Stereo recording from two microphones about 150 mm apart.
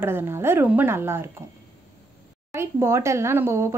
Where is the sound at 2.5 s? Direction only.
15° right (ahead or behind).